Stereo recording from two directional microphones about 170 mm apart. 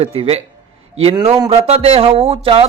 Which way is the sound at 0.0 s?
35° right (ahead or behind).